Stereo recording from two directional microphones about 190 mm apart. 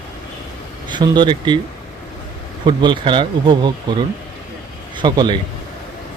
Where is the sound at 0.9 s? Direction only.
25° right (ahead or behind).